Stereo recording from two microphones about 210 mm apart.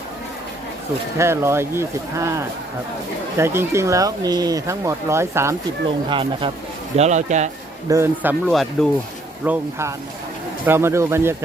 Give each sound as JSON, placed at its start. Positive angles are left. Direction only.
{"t": 1.2, "sound": "speech", "side_deg": -10}
{"t": 6.1, "sound": "speech", "side_deg": -25}
{"t": 7.9, "sound": "speech", "side_deg": -10}
{"t": 8.4, "sound": "speech", "side_deg": 0}
{"t": 9.4, "sound": "speech", "side_deg": -10}